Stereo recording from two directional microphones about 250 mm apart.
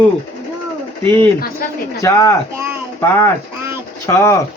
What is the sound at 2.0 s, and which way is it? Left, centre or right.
Speech, centre.